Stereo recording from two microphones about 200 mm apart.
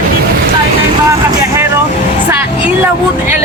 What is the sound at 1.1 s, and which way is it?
Vehicle, 15° right (ahead or behind).